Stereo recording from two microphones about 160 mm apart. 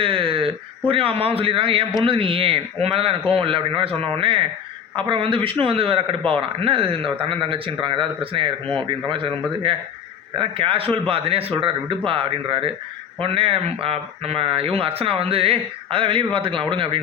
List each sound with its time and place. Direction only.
0.0 s speech: 35° right (ahead or behind)